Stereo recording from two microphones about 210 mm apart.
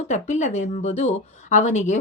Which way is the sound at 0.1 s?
35° left (ahead or behind).